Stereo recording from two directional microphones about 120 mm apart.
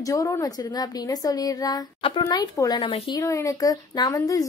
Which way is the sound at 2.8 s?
50° left (ahead or behind).